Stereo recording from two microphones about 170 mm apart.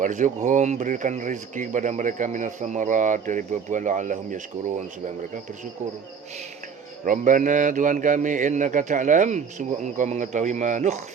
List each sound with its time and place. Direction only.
0.0 s speech: 50° right (ahead or behind)
7.0 s speech: 50° right (ahead or behind)